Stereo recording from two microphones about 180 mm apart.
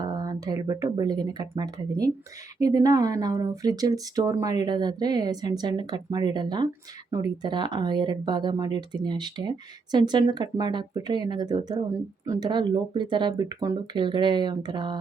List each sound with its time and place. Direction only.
0.0 s speech: 20° right (ahead or behind)